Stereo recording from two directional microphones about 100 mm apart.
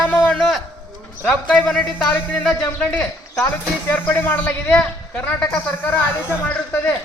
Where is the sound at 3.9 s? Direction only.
20° left (ahead or behind).